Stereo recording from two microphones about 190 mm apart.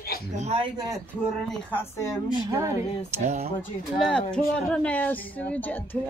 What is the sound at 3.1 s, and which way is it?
Speech, 40° right (ahead or behind).